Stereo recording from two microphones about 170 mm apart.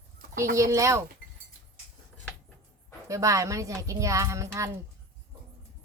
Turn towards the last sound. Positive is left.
turn(degrees=-15)  # may be behind; listen again after turning